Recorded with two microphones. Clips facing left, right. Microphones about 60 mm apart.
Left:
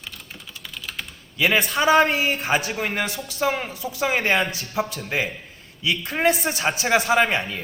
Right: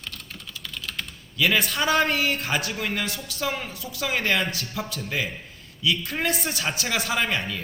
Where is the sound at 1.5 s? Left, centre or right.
Centre.